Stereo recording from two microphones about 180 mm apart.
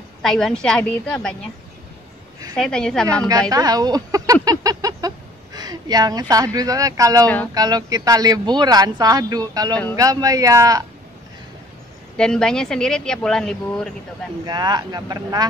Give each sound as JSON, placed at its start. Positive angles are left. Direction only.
{"t": 0.2, "sound": "a woman's voice", "side_deg": 5}
{"t": 2.5, "sound": "a woman's voice", "side_deg": 5}
{"t": 3.3, "sound": "speech", "side_deg": -20}
{"t": 12.2, "sound": "a woman's voice", "side_deg": 5}
{"t": 14.4, "sound": "speech", "side_deg": -25}